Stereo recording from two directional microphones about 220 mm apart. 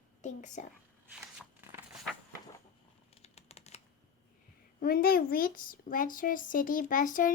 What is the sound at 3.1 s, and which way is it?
Computer keyboard, 30° left (ahead or behind).